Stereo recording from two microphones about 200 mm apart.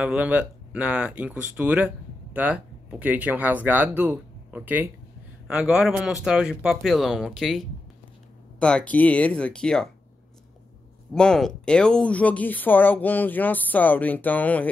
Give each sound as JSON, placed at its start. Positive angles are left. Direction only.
{"t": 0.0, "sound": "speech", "side_deg": -5}
{"t": 11.1, "sound": "speech", "side_deg": 5}